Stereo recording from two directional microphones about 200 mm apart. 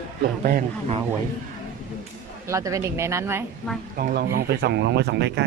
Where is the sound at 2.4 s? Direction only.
15° right (ahead or behind).